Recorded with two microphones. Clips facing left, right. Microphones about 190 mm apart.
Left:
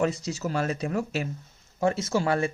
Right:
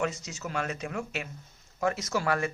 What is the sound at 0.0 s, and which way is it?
Speech, 35° left (ahead or behind).